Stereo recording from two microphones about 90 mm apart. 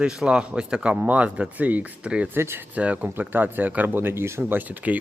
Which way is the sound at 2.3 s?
25° right (ahead or behind).